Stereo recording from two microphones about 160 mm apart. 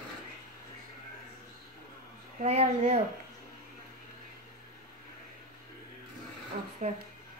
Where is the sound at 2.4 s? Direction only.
40° right (ahead or behind).